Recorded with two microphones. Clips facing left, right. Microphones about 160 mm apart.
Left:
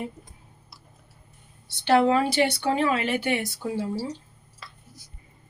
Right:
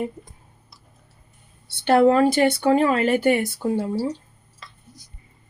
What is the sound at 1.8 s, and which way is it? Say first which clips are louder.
Speech: right 5 dB; 50° right (ahead or behind).